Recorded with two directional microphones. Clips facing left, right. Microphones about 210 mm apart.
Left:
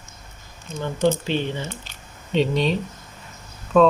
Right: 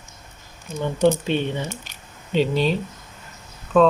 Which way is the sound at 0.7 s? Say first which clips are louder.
Right 2 dB; 15° right (ahead or behind).